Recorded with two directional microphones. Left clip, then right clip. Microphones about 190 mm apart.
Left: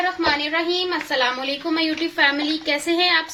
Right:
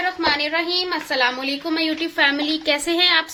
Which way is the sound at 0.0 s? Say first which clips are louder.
Even; 30° right (ahead or behind).